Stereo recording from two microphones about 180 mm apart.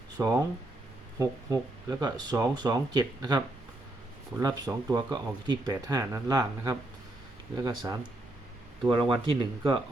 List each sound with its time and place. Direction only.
0.2 s speech: 20° right (ahead or behind)
8.8 s speech: 25° right (ahead or behind)